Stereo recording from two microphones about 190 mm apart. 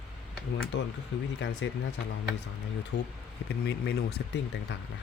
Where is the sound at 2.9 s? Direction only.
65° left (ahead or behind).